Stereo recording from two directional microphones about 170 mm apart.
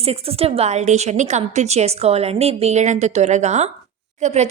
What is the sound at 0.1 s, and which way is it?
A woman's voice, 35° right (ahead or behind).